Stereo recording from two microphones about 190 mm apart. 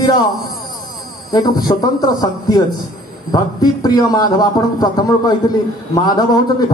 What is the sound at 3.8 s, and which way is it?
A man's voice, 20° left (ahead or behind).